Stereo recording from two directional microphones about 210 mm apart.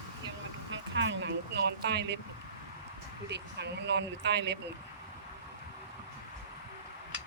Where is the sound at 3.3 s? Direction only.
55° right (ahead or behind).